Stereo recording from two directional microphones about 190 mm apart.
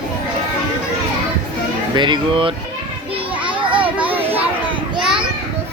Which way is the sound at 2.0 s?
25° right (ahead or behind).